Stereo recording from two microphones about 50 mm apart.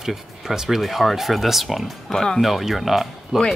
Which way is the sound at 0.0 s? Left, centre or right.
Centre.